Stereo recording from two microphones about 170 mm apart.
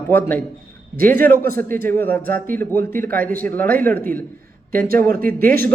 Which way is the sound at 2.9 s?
55° right (ahead or behind).